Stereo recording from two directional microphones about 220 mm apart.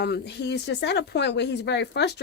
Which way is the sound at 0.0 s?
50° left (ahead or behind).